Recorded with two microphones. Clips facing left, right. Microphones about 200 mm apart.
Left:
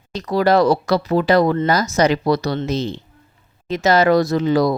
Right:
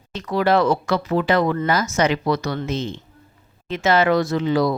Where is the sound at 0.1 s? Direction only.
40° left (ahead or behind).